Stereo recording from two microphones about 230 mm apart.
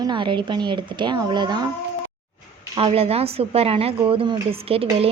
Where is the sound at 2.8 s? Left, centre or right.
Right.